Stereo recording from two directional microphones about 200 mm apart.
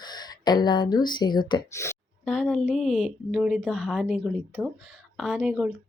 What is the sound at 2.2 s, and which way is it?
A woman's voice, centre (ahead or behind).